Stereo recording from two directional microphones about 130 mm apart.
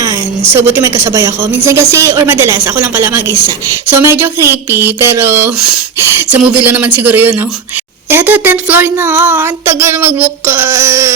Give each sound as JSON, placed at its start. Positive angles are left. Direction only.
{"t": 0.5, "sound": "a woman's voice", "side_deg": -20}